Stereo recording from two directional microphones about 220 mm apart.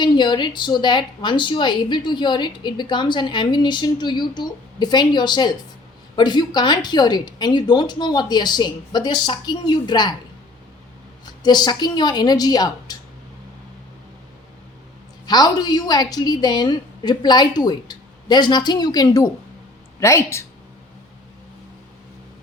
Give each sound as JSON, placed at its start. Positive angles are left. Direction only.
{"t": 0.0, "sound": "speech", "side_deg": 20}
{"t": 11.4, "sound": "speech", "side_deg": 20}
{"t": 15.3, "sound": "speech", "side_deg": 20}